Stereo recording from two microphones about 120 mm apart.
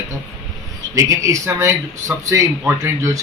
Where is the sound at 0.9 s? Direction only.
25° right (ahead or behind).